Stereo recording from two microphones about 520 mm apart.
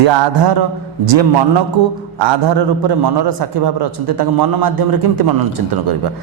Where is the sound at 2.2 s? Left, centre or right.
Right.